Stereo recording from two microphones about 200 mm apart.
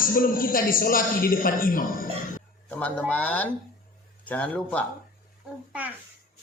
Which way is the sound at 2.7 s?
5° left (ahead or behind).